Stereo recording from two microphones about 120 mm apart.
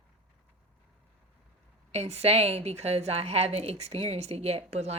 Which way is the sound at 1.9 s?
60° right (ahead or behind).